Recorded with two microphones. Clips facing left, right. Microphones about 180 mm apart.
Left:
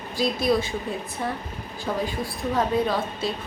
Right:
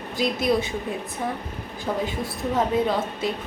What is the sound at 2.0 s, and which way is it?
A woman's voice, 20° right (ahead or behind).